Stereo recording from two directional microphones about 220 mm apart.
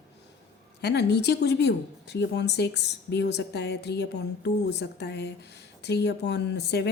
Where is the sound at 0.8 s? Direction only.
50° left (ahead or behind).